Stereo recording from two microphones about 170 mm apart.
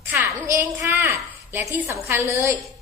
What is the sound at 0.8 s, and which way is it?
A woman's voice, 15° right (ahead or behind).